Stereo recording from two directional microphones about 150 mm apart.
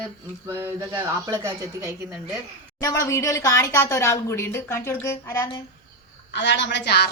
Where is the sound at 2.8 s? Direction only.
20° left (ahead or behind).